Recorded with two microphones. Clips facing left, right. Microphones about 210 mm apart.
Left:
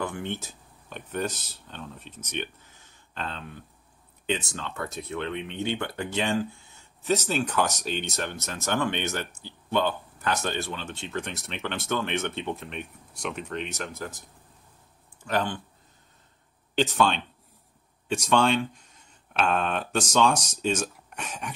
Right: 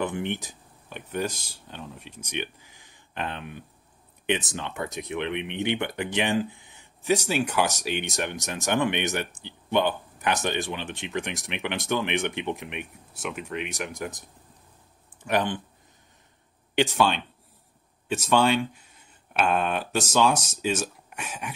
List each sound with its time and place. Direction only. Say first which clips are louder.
0.0 s speech: right 3 dB; 20° right (ahead or behind)
15.2 s speech: right 2 dB; 20° right (ahead or behind)
16.7 s speech: right 1 dB; 10° right (ahead or behind)